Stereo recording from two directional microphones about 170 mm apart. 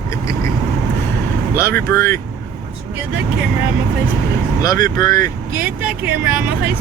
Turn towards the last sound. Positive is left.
turn(degrees=-10)  # may be behind; listen again after turning